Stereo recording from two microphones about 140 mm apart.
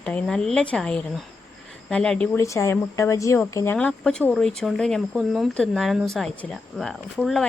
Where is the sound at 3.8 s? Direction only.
5° left (ahead or behind).